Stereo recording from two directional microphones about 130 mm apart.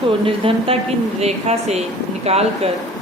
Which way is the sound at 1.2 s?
55° right (ahead or behind).